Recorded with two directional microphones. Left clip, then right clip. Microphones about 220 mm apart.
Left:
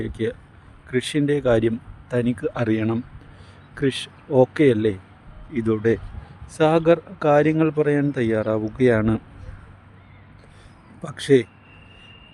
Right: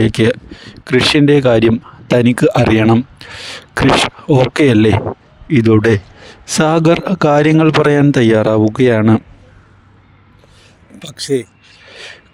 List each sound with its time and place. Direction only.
0.0 s speech: 45° right (ahead or behind)
11.2 s speech: 40° right (ahead or behind)